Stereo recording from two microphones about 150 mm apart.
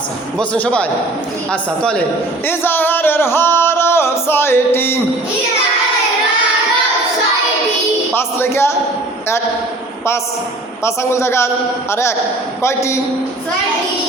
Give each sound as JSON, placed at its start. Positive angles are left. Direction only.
{"t": 0.3, "sound": "speech", "side_deg": 10}
{"t": 2.5, "sound": "speech", "side_deg": 15}
{"t": 8.1, "sound": "speech", "side_deg": 15}
{"t": 10.8, "sound": "a man's voice", "side_deg": 20}